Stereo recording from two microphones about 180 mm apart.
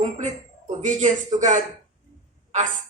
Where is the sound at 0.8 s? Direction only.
45° right (ahead or behind).